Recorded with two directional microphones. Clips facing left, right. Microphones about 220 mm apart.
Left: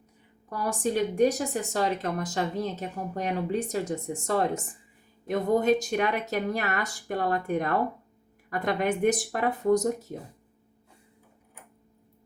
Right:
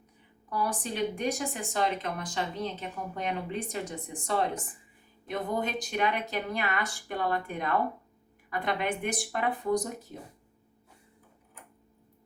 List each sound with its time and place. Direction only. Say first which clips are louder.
0.5 s speech: left 5 dB; 45° left (ahead or behind)